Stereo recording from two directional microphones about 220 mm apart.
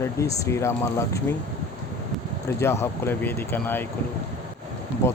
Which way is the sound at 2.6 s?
10° left (ahead or behind).